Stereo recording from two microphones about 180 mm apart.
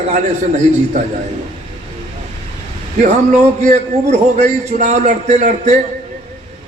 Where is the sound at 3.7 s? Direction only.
40° right (ahead or behind).